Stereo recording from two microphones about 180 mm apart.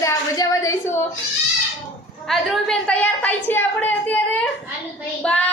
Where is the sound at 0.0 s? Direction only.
20° left (ahead or behind).